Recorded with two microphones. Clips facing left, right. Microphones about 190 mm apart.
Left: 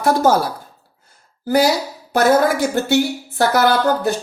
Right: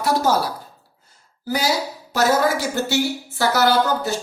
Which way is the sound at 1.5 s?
55° left (ahead or behind).